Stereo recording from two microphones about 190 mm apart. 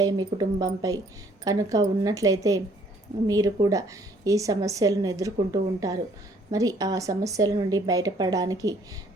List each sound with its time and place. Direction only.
0.0 s a woman's voice: 20° right (ahead or behind)